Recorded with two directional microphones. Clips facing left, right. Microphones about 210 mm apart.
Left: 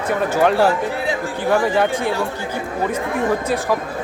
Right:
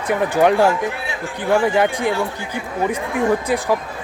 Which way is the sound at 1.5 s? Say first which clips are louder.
Right 1 dB; 10° right (ahead or behind).